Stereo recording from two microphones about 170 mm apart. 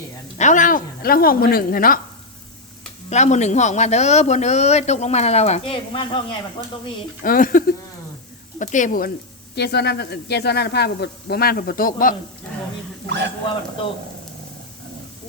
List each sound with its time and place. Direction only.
0.3 s a woman's voice: 45° left (ahead or behind)
3.1 s a man's voice: 45° left (ahead or behind)
7.2 s a woman's voice: 55° left (ahead or behind)
9.6 s speech: 75° left (ahead or behind); by 12.1 s 55° left (ahead or behind)
13.1 s a man's voice: 90° right